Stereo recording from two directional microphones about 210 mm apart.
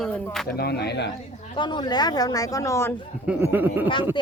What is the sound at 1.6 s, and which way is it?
Speech, 20° left (ahead or behind).